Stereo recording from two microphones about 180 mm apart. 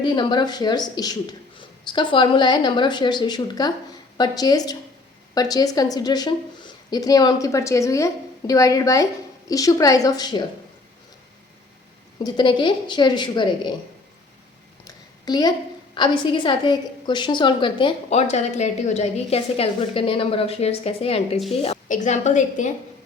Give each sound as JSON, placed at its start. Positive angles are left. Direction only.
{"t": 0.0, "sound": "a woman's voice", "side_deg": 25}
{"t": 12.2, "sound": "a woman's voice", "side_deg": 25}
{"t": 14.8, "sound": "a sound", "side_deg": 20}
{"t": 16.0, "sound": "a woman's voice", "side_deg": 25}